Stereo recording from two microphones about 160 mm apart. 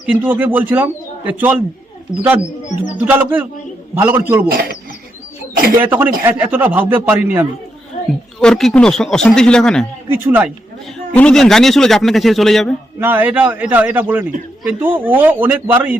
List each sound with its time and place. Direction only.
0.0 s speech: 10° right (ahead or behind)
4.4 s speech: 65° right (ahead or behind)
5.8 s speech: 10° right (ahead or behind)
8.4 s speech: 5° left (ahead or behind)
10.1 s speech: 10° right (ahead or behind)
11.1 s speech: 5° left (ahead or behind)
13.0 s speech: 10° right (ahead or behind)